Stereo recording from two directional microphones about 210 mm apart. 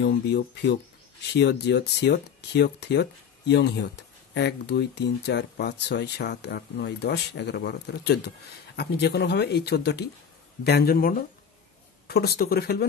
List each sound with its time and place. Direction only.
0.0 s speech: 50° left (ahead or behind)